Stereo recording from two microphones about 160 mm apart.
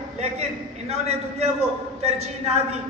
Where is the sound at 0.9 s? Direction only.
40° right (ahead or behind).